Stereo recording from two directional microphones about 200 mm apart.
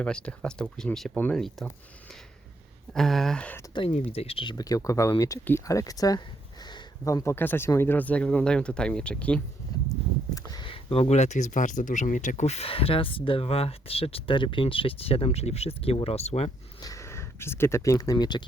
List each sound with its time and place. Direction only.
0.0 s speech: 5° left (ahead or behind)
2.9 s speech: centre (ahead or behind)
3.8 s speech: 30° left (ahead or behind); by 9.4 s 5° left (ahead or behind)
9.7 s horse: 20° left (ahead or behind)
10.3 s speech: 20° left (ahead or behind)
16.8 s speech: 15° left (ahead or behind)